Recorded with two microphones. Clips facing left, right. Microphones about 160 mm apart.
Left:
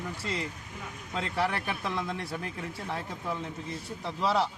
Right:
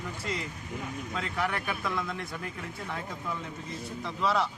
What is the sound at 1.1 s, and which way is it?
Speech, 30° left (ahead or behind).